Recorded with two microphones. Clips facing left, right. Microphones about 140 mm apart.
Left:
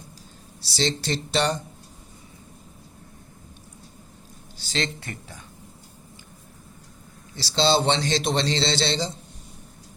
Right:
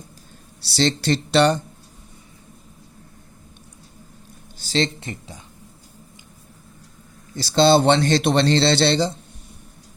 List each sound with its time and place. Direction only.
0.6 s a man's voice: 65° right (ahead or behind)
4.5 s a sound: 40° right (ahead or behind)
4.9 s speech: 20° right (ahead or behind)
7.3 s a man's voice: 50° right (ahead or behind)